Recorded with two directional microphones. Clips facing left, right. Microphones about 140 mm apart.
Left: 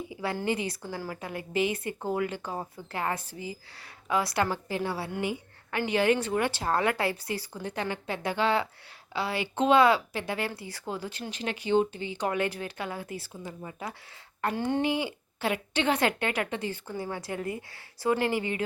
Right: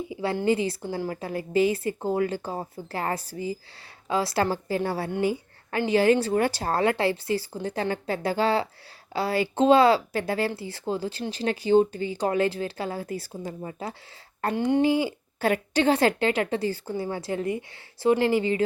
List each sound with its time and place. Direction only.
0.1 s speech: 25° right (ahead or behind); by 13.5 s 40° right (ahead or behind)
13.6 s speech: 30° right (ahead or behind)
14.5 s speech: 20° right (ahead or behind)
15.4 s speech: 40° right (ahead or behind)